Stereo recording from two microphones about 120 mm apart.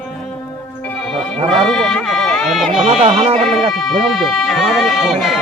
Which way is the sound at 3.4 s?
Centre (ahead or behind).